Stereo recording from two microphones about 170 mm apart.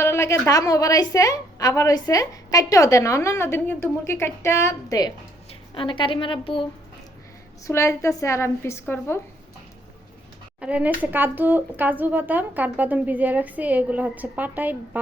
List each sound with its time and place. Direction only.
0.0 s a woman's voice: 15° left (ahead or behind); by 6.7 s 30° left (ahead or behind)
7.6 s a woman's voice: 15° left (ahead or behind)
10.6 s speech: 10° right (ahead or behind)